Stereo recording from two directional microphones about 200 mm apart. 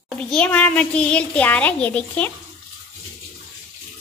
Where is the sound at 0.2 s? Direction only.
5° left (ahead or behind).